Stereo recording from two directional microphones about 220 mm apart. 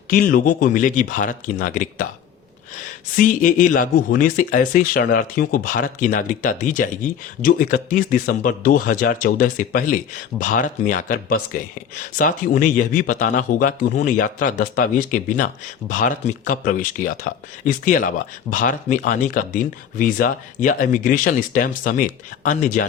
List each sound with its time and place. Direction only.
0.1 s speech: 40° left (ahead or behind)
3.2 s speech: 35° left (ahead or behind)